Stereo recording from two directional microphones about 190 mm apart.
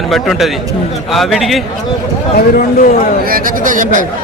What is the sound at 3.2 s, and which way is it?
Speech, 50° right (ahead or behind).